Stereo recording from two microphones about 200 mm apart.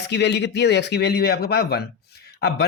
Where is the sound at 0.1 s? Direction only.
60° left (ahead or behind).